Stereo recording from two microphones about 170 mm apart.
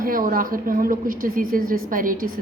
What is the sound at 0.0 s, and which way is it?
A woman's voice, 55° right (ahead or behind).